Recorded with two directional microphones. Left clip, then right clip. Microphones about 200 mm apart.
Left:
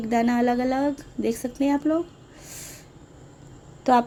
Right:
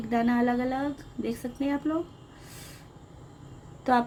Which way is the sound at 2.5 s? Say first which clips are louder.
Left 6 dB; 30° left (ahead or behind).